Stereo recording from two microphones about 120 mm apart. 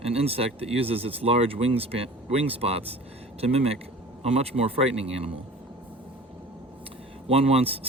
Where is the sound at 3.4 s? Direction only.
55° right (ahead or behind).